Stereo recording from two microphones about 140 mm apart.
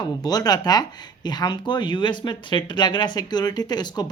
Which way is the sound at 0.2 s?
30° left (ahead or behind).